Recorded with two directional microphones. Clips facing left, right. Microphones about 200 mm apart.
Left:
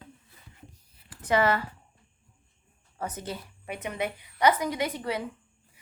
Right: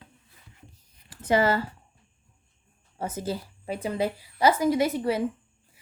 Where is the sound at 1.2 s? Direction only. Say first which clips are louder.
Right 2 dB; 30° right (ahead or behind).